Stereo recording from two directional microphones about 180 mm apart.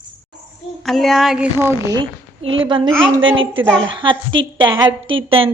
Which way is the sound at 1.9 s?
25° right (ahead or behind).